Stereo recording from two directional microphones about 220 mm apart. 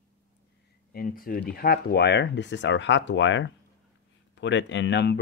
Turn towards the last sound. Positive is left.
turn(degrees=50)  # may be behind; listen again after turning